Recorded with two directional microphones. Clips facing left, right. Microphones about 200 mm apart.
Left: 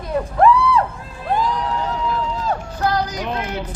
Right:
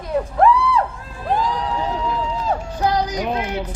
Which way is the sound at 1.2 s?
5° right (ahead or behind).